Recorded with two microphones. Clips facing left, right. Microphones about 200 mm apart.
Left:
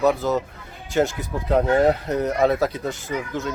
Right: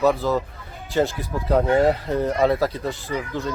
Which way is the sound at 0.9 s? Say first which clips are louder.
Even; centre (ahead or behind).